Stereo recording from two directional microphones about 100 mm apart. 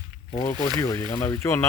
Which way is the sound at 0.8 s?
30° left (ahead or behind).